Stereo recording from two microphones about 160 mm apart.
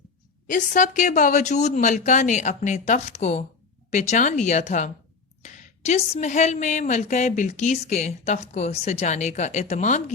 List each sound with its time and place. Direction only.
0.5 s a woman's voice: 55° left (ahead or behind)